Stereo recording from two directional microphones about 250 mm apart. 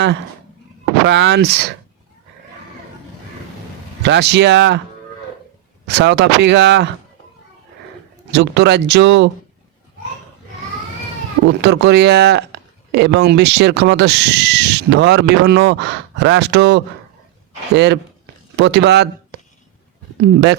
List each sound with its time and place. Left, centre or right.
1.0 s speech: right
4.0 s speech: right
5.8 s speech: right
8.3 s speech: right
11.4 s speech: right
20.1 s speech: right